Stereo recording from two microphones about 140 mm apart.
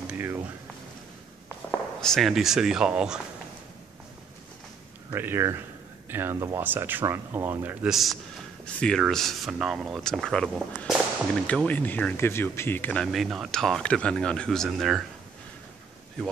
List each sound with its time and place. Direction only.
1.7 s speech: 5° left (ahead or behind)
5.1 s speech: 15° right (ahead or behind)
7.9 s speech: centre (ahead or behind)
13.0 s speech: centre (ahead or behind)